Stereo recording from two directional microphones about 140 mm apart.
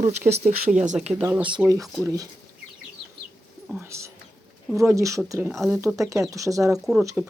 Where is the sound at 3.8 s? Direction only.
20° right (ahead or behind).